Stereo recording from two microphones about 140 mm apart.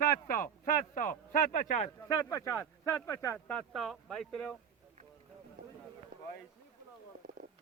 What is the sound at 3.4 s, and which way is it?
Speech, 5° left (ahead or behind).